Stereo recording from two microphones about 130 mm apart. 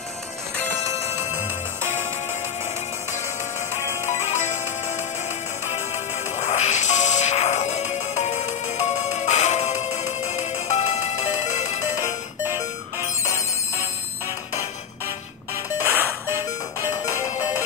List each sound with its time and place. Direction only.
4.0 s music: 60° left (ahead or behind)
5.7 s music: 60° left (ahead or behind)
15.8 s music: 15° right (ahead or behind)